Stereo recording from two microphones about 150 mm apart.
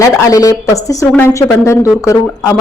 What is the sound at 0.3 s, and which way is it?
A woman's voice, 20° left (ahead or behind).